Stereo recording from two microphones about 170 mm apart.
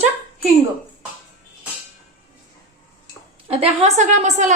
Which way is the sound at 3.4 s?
35° right (ahead or behind).